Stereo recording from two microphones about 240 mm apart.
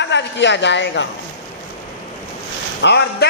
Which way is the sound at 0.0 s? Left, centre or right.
Left.